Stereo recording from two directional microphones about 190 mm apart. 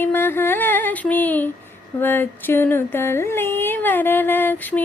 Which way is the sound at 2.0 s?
10° left (ahead or behind).